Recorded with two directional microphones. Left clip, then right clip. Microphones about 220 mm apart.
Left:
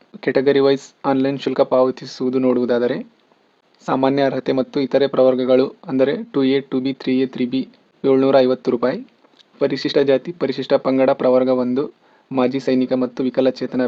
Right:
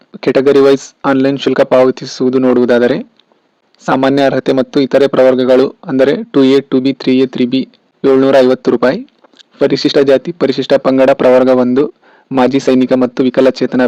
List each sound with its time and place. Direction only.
0.1 s a man's voice: 25° right (ahead or behind)